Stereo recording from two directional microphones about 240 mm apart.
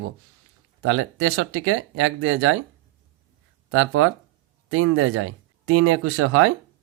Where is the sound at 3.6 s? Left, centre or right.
Right.